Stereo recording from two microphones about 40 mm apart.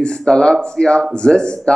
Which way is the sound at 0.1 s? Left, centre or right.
Centre.